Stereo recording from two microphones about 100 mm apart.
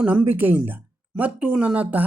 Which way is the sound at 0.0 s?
15° right (ahead or behind).